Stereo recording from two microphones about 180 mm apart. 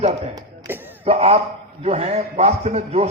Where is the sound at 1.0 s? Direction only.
35° right (ahead or behind).